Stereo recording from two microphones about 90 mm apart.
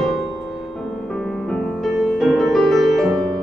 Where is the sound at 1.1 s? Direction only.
10° left (ahead or behind).